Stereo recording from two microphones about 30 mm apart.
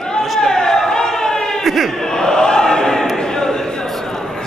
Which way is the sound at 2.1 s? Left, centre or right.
Left.